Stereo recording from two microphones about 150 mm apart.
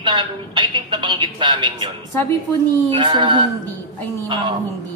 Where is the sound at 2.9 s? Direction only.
30° right (ahead or behind).